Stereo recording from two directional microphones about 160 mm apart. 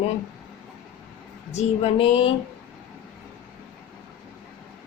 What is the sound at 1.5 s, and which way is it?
Speech, 45° left (ahead or behind).